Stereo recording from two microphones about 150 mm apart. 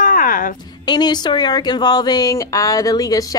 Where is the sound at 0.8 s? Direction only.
30° left (ahead or behind).